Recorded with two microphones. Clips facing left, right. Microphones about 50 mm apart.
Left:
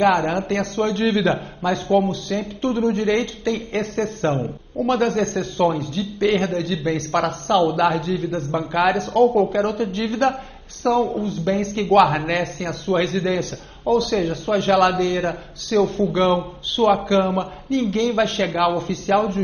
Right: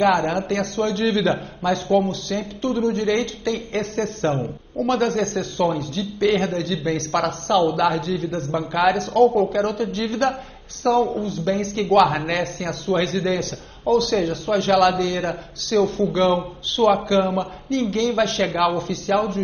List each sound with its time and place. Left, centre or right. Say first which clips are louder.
0.0 s a man's voice: left 1 dB; centre
2.6 s a man's voice: left 1 dB; left
10.8 s a man's voice: even; centre
18.4 s speech: even; centre
18.8 s a man's voice: left 2 dB; centre